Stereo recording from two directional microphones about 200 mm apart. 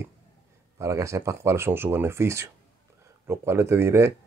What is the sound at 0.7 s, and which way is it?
Speech, 15° right (ahead or behind).